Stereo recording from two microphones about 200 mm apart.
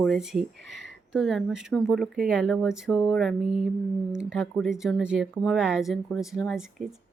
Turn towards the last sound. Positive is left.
turn(degrees=0)  # may be behind; listen again after turning